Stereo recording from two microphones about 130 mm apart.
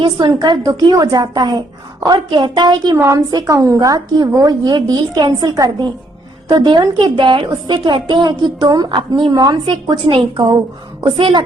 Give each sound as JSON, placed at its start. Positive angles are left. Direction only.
{"t": 0.3, "sound": "a woman's voice", "side_deg": -35}